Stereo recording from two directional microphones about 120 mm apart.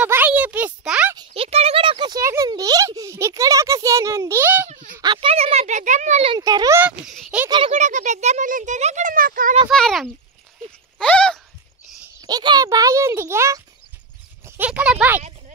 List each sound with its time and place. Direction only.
0.0 s a sound: 15° right (ahead or behind)
1.3 s speech: 55° right (ahead or behind); by 4.6 s 15° right (ahead or behind)
5.0 s speech: 40° right (ahead or behind)
5.3 s a child's voice: 60° right (ahead or behind); by 6.2 s 85° right
6.4 s speech: 30° right (ahead or behind)
6.8 s speech: 10° right (ahead or behind)
7.7 s speech: 85° right
9.7 s speech: 5° left (ahead or behind)
11.0 s a sound: 5° left (ahead or behind)
12.2 s speech: 35° right (ahead or behind); by 15.2 s 10° right (ahead or behind)